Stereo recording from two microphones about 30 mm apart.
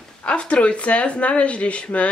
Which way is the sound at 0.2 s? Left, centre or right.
Left.